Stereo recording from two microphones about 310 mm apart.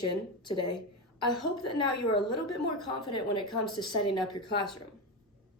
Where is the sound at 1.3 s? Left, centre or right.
Centre.